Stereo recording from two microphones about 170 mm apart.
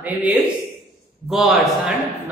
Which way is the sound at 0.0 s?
10° right (ahead or behind).